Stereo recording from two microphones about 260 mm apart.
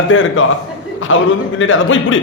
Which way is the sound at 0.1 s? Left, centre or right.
Left.